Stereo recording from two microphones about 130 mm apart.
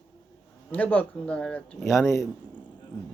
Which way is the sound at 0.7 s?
10° left (ahead or behind).